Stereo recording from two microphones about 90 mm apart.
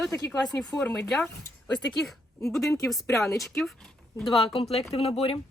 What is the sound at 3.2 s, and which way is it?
Speech, 35° left (ahead or behind).